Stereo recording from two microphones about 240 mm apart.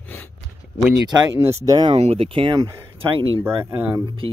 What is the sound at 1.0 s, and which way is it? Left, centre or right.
Speech, centre.